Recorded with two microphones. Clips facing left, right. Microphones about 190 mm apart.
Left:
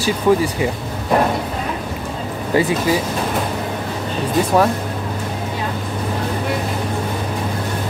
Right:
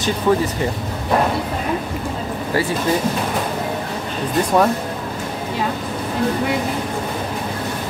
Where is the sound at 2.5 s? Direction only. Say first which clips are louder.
Left 4 dB; 20° left (ahead or behind).